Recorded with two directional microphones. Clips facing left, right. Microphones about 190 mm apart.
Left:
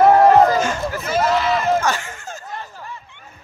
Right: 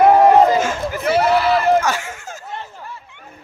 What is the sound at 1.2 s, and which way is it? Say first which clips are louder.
Speech: right 2 dB; 5° right (ahead or behind).